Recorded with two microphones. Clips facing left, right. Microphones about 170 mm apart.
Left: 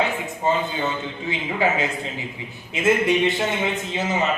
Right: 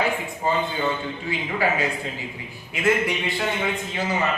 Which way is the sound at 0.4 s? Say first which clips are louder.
Left 1 dB; 20° left (ahead or behind).